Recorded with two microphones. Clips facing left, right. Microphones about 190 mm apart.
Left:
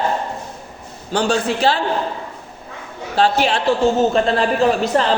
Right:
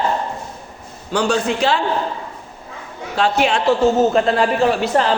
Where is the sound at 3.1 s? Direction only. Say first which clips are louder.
Left 1 dB; 35° left (ahead or behind).